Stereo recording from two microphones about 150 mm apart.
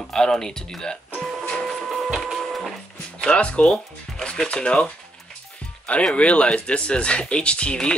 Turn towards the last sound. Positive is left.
turn(degrees=5)  # may be behind; listen again after turning